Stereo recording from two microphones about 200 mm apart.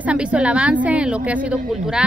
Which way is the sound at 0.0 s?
5° right (ahead or behind).